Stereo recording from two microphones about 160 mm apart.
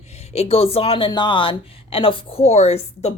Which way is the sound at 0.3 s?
40° left (ahead or behind).